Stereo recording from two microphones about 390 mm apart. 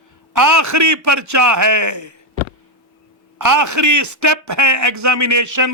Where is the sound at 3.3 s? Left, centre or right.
Right.